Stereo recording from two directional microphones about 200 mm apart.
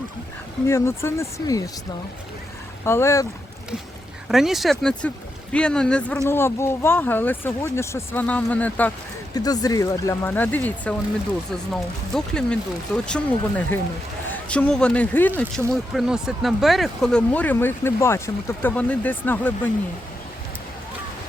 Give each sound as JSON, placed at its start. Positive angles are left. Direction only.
{"t": 0.7, "sound": "speech", "side_deg": 15}
{"t": 2.8, "sound": "speech", "side_deg": 15}
{"t": 4.3, "sound": "speech", "side_deg": 0}
{"t": 9.3, "sound": "speech", "side_deg": 20}